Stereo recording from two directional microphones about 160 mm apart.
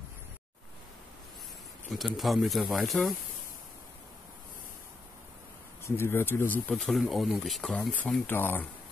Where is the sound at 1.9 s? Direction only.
Centre (ahead or behind).